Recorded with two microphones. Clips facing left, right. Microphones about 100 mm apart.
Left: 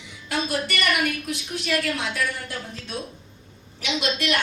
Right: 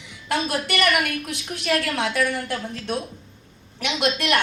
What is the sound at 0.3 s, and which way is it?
A woman's voice, 70° right (ahead or behind).